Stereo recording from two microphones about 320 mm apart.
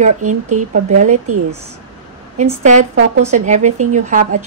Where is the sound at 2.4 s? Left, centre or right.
Right.